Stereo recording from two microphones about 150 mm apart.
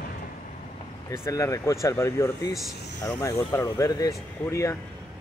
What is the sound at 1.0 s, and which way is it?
Speech, 20° left (ahead or behind).